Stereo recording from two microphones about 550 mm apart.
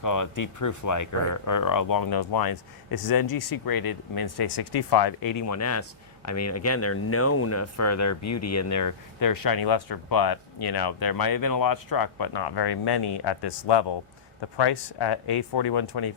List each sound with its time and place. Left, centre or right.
0.0 s speech: left